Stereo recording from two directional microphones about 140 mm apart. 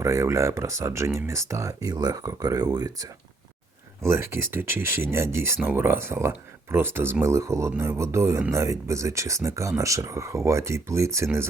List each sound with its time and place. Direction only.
0.0 s speech: 20° right (ahead or behind)